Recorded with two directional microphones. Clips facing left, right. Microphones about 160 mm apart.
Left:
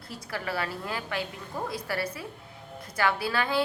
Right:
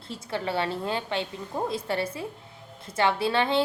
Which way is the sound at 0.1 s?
25° right (ahead or behind).